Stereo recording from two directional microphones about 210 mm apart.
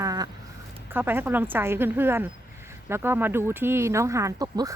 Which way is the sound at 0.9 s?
10° right (ahead or behind).